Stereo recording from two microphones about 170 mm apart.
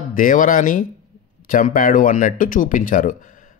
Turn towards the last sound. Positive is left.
turn(degrees=50)  # may be behind; listen again after turning